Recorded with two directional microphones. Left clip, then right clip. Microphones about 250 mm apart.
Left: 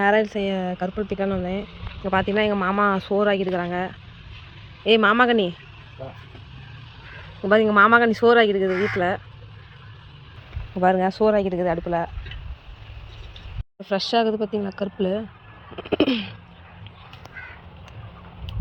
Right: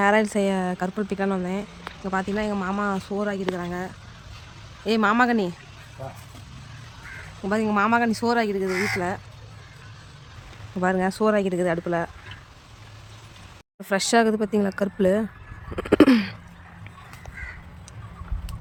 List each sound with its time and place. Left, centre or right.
0.0 s speech: centre
2.3 s speech: centre
7.4 s speech: centre
10.8 s speech: centre
13.8 s speech: centre
15.7 s a sound: right